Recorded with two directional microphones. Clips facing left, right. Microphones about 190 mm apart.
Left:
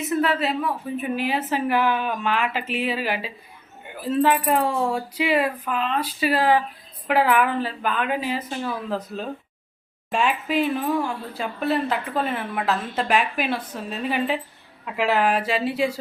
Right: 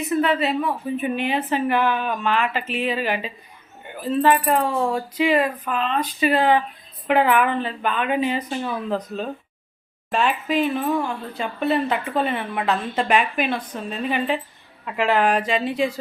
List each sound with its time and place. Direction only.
0.0 s a woman's voice: centre (ahead or behind)